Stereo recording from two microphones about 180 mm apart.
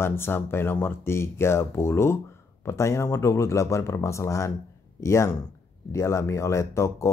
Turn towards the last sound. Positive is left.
turn(degrees=15)  # may be behind; listen again after turning